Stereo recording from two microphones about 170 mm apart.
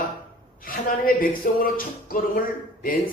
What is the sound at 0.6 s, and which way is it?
A man's voice, 55° left (ahead or behind).